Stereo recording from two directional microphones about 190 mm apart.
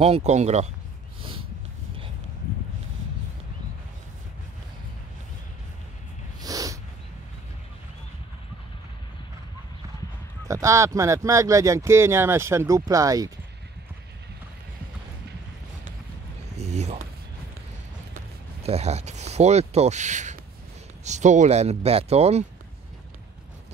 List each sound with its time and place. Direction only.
0.0 s speech: 35° right (ahead or behind)
6.4 s snort: 20° right (ahead or behind)
10.5 s speech: 15° right (ahead or behind)
16.5 s a sound: 35° right (ahead or behind)
18.6 s speech: 35° right (ahead or behind)